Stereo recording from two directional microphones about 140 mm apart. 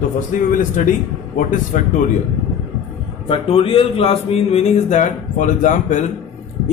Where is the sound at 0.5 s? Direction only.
70° left (ahead or behind).